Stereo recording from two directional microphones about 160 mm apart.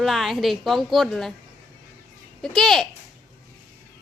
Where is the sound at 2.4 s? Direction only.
Centre (ahead or behind).